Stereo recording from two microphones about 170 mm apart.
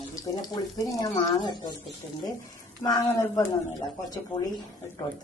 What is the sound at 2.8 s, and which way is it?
Speech, 20° left (ahead or behind).